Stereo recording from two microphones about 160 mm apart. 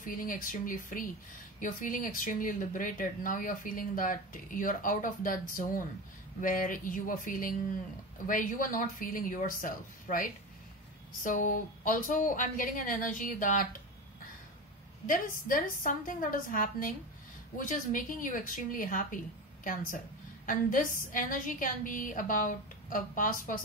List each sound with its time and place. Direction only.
0.0 s speech: 60° left (ahead or behind)
15.0 s speech: 60° left (ahead or behind)